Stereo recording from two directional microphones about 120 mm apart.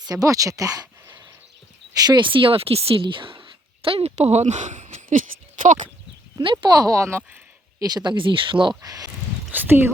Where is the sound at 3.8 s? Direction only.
55° right (ahead or behind); by 5.9 s 90° right.